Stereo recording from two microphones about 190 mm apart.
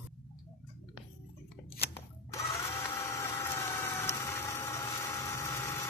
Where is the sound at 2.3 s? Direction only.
15° left (ahead or behind).